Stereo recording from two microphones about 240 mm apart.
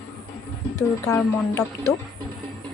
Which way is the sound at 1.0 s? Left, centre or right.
Centre.